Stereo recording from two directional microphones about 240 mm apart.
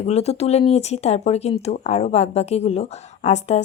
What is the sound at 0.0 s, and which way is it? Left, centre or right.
A woman's voice, left.